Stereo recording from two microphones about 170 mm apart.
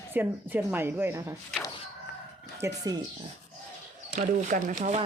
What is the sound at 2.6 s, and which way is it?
Speech, 20° right (ahead or behind).